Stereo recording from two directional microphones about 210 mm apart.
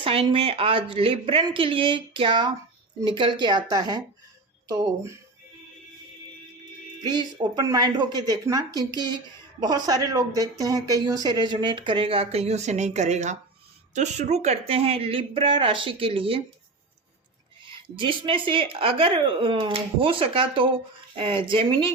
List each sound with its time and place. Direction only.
0.0 s speech: 25° right (ahead or behind)
7.0 s speech: 20° right (ahead or behind)
17.9 s speech: 25° right (ahead or behind)